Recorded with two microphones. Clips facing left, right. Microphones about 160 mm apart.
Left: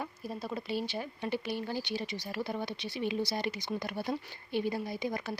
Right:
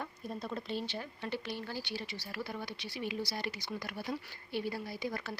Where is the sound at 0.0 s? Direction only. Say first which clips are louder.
Left 2 dB; 5° left (ahead or behind).